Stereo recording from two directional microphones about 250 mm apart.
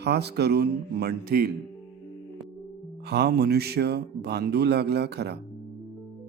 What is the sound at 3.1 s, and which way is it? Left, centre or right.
Speech, right.